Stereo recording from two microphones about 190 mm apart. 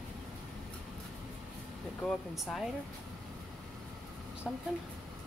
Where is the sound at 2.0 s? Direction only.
5° left (ahead or behind).